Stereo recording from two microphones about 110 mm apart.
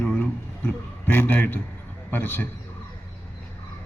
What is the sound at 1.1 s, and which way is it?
A man's voice, 20° left (ahead or behind).